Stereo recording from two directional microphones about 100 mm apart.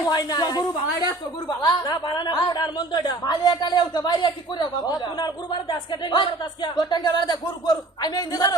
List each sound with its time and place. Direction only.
0.0 s a woman's voice: 40° left (ahead or behind)